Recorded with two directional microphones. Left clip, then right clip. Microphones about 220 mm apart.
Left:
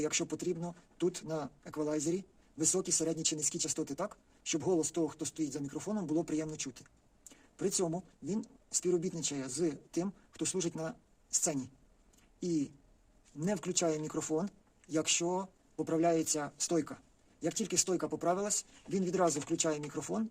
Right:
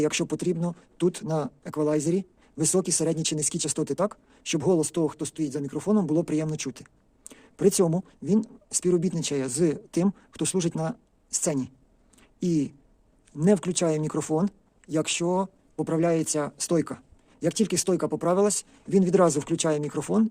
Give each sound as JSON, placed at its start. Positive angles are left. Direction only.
{"t": 0.0, "sound": "speech", "side_deg": -40}